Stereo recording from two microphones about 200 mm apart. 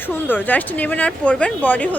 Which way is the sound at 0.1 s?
10° left (ahead or behind).